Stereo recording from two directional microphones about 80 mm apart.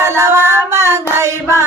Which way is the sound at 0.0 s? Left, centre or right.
Right.